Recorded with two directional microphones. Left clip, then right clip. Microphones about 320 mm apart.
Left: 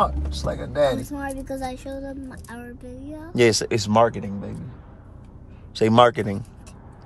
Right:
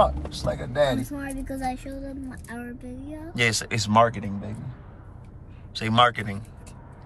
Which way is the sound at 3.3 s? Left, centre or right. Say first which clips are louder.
Left 5 dB; centre.